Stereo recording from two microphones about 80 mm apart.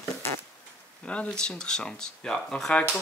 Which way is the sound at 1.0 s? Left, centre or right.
Centre.